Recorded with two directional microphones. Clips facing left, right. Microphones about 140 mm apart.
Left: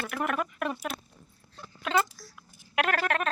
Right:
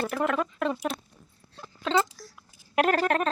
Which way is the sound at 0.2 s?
20° right (ahead or behind).